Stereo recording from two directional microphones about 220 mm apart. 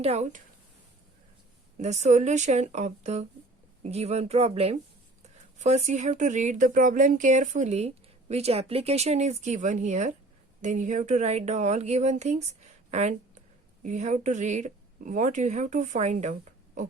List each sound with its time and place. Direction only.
0.0 s speech: 30° right (ahead or behind)
1.8 s speech: 30° right (ahead or behind)